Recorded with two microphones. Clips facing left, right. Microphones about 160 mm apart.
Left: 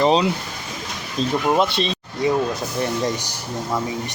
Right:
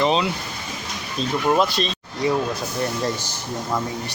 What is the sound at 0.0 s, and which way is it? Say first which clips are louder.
Speech: left 3 dB; 35° left (ahead or behind).